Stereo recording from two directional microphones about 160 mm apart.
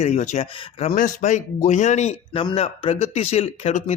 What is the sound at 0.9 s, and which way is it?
A man's voice, 55° left (ahead or behind).